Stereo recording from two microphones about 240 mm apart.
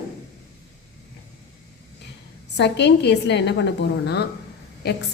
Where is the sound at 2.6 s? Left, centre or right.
Left.